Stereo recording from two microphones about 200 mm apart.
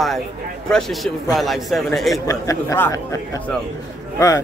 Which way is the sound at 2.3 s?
15° left (ahead or behind).